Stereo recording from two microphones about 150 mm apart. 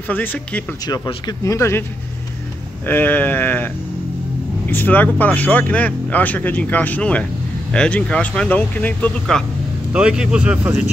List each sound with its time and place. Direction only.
0.1 s speech: 10° left (ahead or behind)
0.8 s speech: 30° left (ahead or behind)
2.9 s speech: 10° left (ahead or behind)
9.9 s speech: 5° right (ahead or behind)